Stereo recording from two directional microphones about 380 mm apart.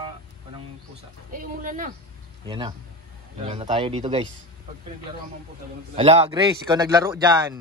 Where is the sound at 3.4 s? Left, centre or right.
Centre.